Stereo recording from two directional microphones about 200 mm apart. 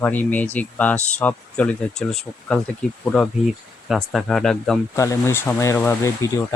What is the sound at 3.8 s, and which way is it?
Speech, centre (ahead or behind).